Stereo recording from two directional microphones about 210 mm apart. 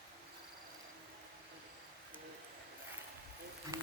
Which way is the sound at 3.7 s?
15° right (ahead or behind).